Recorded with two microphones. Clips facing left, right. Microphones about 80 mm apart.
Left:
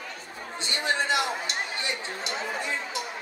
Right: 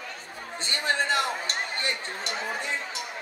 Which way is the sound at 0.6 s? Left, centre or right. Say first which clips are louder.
Even; right.